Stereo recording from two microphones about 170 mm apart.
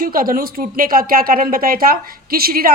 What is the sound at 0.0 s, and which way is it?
Speech, 55° right (ahead or behind).